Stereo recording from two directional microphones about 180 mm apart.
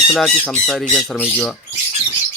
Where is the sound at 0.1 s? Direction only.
5° left (ahead or behind).